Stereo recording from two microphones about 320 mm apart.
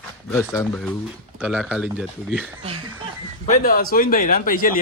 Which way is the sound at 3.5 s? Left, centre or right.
Left.